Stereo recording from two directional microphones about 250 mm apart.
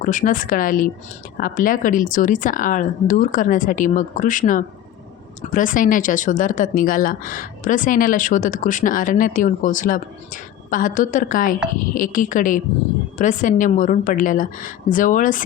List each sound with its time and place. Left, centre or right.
0.0 s speech: left